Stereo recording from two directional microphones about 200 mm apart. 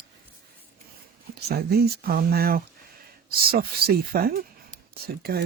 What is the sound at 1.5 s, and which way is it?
Speech, 50° right (ahead or behind).